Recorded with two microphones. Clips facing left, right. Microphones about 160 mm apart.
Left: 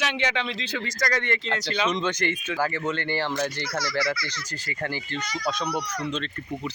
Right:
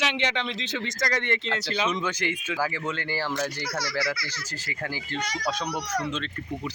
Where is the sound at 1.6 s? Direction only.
5° right (ahead or behind).